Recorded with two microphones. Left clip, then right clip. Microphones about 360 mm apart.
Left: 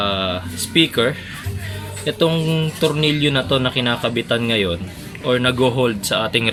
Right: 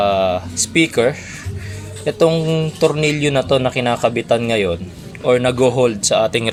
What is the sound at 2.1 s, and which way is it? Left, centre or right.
Speech, centre.